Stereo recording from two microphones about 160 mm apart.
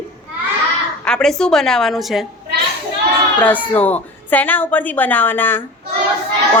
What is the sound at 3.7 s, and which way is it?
A woman's voice, 10° left (ahead or behind).